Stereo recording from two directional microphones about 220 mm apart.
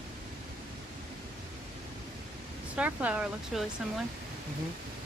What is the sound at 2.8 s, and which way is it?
Speech, 5° right (ahead or behind).